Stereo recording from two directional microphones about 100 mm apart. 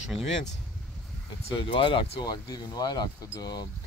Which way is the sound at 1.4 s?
60° left (ahead or behind).